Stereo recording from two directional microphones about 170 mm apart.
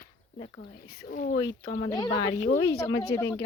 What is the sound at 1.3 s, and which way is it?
Speech, 90° left.